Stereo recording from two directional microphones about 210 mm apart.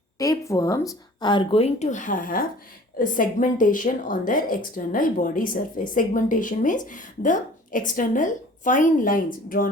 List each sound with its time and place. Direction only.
0.2 s speech: 15° left (ahead or behind); by 9.6 s 40° left (ahead or behind)